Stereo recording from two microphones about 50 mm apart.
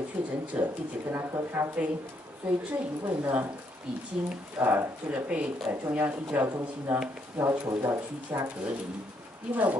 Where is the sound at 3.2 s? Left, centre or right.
Right.